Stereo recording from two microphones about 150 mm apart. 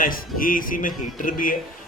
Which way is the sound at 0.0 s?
70° left (ahead or behind).